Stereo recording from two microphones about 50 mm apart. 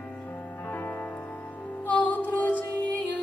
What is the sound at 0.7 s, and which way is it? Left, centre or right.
Music, left.